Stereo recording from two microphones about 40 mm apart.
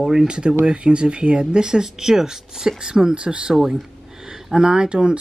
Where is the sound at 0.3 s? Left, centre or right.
Right.